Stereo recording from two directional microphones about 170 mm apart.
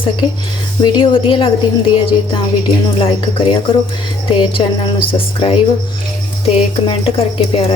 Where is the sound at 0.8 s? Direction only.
30° left (ahead or behind).